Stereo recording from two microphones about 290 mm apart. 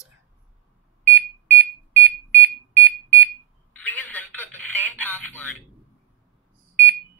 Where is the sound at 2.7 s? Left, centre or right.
Right.